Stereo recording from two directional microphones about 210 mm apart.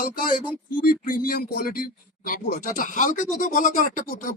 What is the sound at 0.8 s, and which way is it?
Speech, 40° left (ahead or behind).